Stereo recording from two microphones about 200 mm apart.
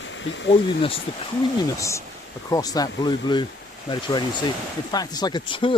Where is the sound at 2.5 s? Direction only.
20° left (ahead or behind).